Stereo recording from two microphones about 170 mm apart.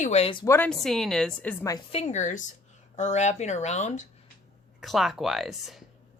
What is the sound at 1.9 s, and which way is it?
Speech, 40° left (ahead or behind).